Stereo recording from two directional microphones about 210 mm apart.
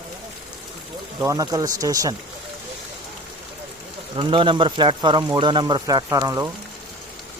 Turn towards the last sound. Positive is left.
turn(degrees=-15)  # may be behind; listen again after turning